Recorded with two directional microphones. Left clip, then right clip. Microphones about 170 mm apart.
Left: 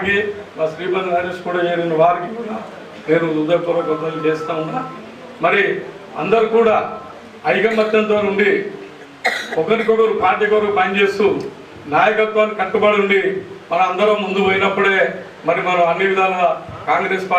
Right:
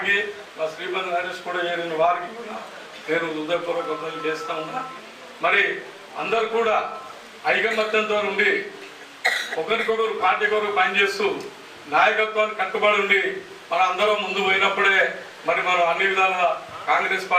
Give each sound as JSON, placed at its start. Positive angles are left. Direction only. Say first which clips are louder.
{"t": 0.0, "sound": "a man's voice", "louder": "left 4 dB", "side_deg": 10}